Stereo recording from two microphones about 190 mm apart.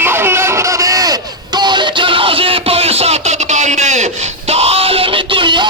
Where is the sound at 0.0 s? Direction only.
10° right (ahead or behind).